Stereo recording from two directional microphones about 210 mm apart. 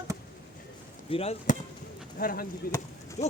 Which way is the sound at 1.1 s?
30° left (ahead or behind).